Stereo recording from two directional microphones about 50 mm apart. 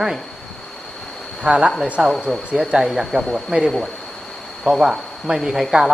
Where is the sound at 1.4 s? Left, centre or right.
Centre.